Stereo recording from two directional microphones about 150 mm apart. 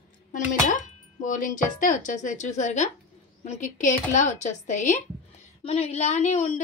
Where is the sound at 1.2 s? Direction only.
60° left (ahead or behind).